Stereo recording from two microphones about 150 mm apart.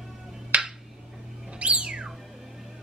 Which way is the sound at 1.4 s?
5° right (ahead or behind).